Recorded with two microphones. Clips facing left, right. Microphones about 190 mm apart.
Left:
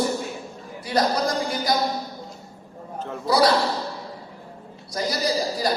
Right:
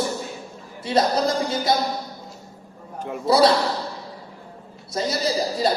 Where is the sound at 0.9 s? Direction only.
25° right (ahead or behind).